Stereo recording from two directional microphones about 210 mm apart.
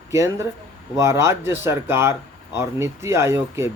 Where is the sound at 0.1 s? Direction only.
15° right (ahead or behind).